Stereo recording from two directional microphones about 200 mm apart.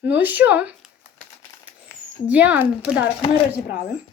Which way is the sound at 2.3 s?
5° right (ahead or behind).